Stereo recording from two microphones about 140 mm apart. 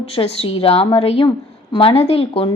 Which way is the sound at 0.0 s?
45° left (ahead or behind).